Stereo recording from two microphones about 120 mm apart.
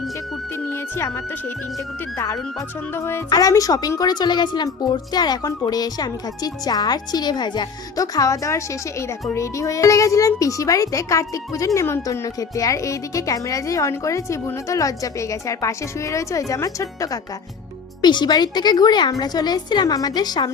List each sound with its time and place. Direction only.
0.5 s a child's voice: 20° left (ahead or behind)
3.2 s a woman's voice: 30° left (ahead or behind)